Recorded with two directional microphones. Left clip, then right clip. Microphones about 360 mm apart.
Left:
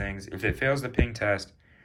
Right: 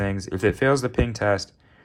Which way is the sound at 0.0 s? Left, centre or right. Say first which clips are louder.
Right 7 dB; centre.